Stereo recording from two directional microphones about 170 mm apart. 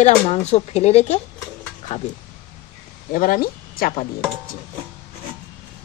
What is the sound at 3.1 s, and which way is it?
Speech, 55° left (ahead or behind).